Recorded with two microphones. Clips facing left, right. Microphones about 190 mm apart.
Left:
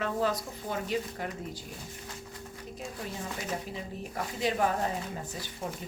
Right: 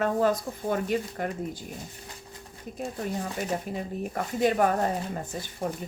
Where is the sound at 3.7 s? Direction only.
50° right (ahead or behind).